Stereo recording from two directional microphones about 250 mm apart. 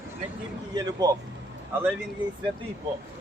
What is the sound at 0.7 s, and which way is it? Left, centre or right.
Speech, centre.